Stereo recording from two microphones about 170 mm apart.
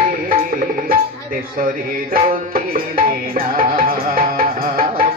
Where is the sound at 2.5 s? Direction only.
60° right (ahead or behind).